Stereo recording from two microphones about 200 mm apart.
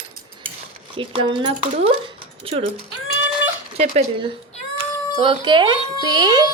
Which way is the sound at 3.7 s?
30° right (ahead or behind).